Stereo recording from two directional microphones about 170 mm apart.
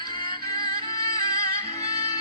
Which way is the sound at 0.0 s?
25° left (ahead or behind).